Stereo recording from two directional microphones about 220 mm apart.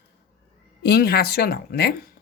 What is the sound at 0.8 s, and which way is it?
Speech, 45° left (ahead or behind).